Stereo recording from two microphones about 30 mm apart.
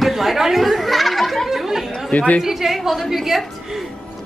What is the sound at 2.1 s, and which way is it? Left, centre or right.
Speech, left.